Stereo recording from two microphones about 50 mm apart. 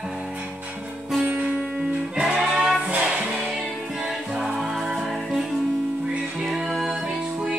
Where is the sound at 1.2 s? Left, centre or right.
Right.